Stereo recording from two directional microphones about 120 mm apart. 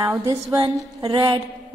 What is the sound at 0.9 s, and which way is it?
Speech, 35° right (ahead or behind).